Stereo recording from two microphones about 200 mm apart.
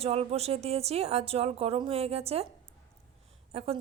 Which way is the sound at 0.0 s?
30° right (ahead or behind).